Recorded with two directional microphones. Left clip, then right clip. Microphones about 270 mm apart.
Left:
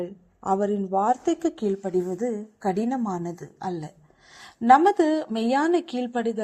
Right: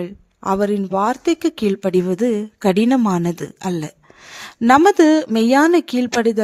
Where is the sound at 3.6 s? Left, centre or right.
Right.